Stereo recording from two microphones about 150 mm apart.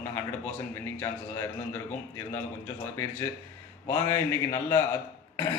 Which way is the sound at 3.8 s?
15° left (ahead or behind).